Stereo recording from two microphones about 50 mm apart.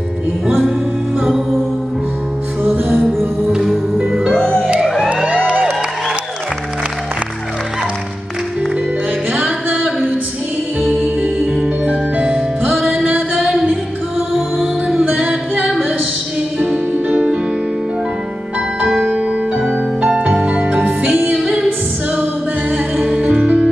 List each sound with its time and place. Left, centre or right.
1.2 s music: centre
2.9 s music: centre
4.3 s music: centre
4.6 s music: right
4.8 s emergency vehicle: centre
5.1 s a sound: right
10.9 s music: right
15.1 s music: right
16.7 s music: right
18.9 s music: centre
20.0 s music: right
21.4 s music: centre
22.9 s music: centre